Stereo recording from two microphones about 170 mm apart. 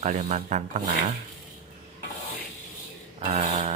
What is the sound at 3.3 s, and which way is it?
Speech, 40° right (ahead or behind).